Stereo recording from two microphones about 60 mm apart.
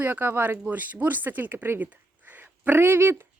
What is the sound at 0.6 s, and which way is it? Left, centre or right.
Speech, right.